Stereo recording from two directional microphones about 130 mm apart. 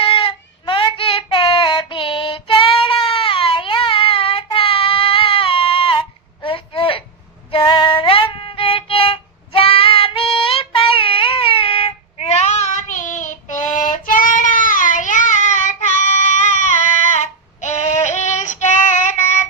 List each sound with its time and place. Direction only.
0.0 s child singing: 45° left (ahead or behind)
7.5 s music: 40° left (ahead or behind); by 16.7 s 70° left (ahead or behind)
17.2 s female singing: 65° left (ahead or behind)